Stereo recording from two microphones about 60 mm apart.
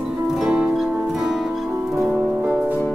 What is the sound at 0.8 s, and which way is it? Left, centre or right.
Music, centre.